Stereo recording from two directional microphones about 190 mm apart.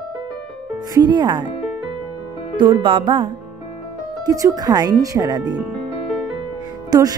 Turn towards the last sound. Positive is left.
turn(degrees=-20)  # may be behind; listen again after turning